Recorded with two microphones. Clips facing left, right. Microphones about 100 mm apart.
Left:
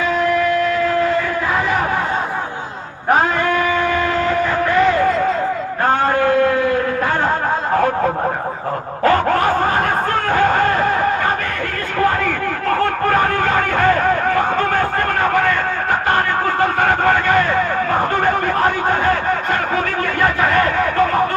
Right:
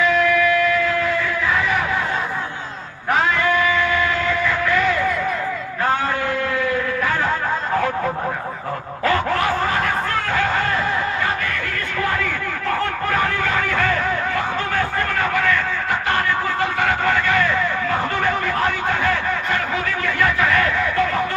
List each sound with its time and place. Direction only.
0.0 s music: 40° left (ahead or behind)
3.1 s train: 40° left (ahead or behind)
5.8 s a sound: 45° left (ahead or behind)